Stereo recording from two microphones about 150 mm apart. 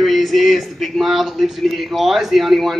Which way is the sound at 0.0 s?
Centre (ahead or behind).